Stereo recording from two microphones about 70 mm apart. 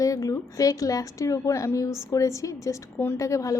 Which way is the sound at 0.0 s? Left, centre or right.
Left.